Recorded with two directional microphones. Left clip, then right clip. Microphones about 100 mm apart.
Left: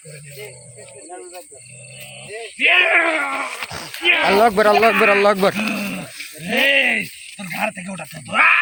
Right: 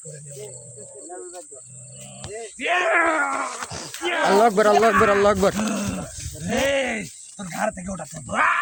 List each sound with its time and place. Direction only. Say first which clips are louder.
2.3 s speech: left 8 dB; 10° right (ahead or behind)
5.4 s speech: left 3 dB; 5° right (ahead or behind)
5.7 s a sound: left 3 dB; 45° right (ahead or behind)
6.5 s a sound: left 6 dB; 10° right (ahead or behind)
7.5 s speech: left 2 dB; centre (ahead or behind)
7.9 s speech: left 9 dB; 15° right (ahead or behind)